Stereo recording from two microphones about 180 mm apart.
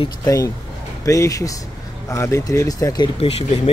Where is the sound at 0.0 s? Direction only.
20° left (ahead or behind).